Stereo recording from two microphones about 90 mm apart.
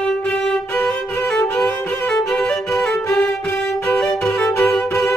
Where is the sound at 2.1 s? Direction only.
5° left (ahead or behind).